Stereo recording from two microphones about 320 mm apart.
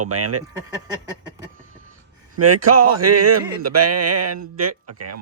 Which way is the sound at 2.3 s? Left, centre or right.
Right.